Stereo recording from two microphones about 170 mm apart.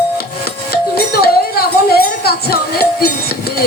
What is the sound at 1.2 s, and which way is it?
Music, 65° left (ahead or behind).